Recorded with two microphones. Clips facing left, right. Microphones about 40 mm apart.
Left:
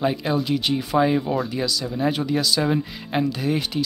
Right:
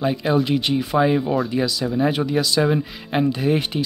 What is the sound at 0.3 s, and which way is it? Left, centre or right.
Speech, centre.